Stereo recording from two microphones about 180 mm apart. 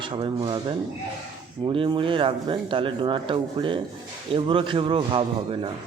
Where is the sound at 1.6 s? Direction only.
25° right (ahead or behind).